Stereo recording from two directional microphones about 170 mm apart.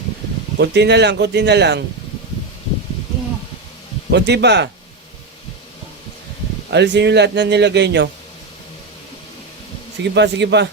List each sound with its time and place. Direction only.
0.6 s speech: 85° right
4.1 s speech: 85° right
6.7 s speech: 90° right
10.0 s speech: 90° right